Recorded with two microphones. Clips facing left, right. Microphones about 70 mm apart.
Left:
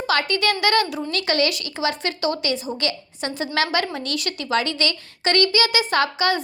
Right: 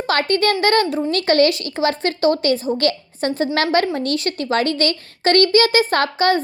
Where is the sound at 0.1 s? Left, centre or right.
Right.